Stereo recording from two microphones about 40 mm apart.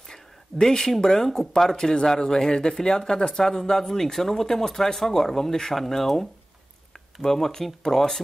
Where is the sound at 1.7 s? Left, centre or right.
Centre.